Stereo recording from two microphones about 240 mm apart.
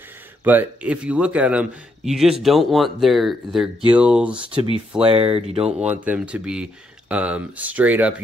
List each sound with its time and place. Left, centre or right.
0.4 s speech: centre
5.0 s speech: right
6.0 s speech: centre